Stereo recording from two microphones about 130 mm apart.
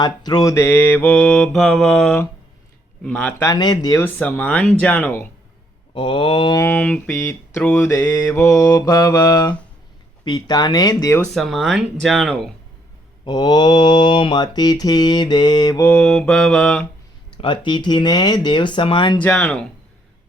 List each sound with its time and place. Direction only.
0.0 s mantra: 30° left (ahead or behind); by 3.4 s 10° left (ahead or behind)
3.4 s mantra: 30° left (ahead or behind)
4.0 s mantra: 10° left (ahead or behind)
5.9 s mantra: 40° left (ahead or behind)
6.6 s mantra: 15° left (ahead or behind)
8.0 s mantra: 10° left (ahead or behind); by 11.2 s 25° left (ahead or behind)
11.3 s speech: centre (ahead or behind)
13.2 s mantra: 35° left (ahead or behind)
15.8 s mantra: 15° left (ahead or behind)
17.3 s mantra: 40° left (ahead or behind)
19.2 s mantra: 10° left (ahead or behind)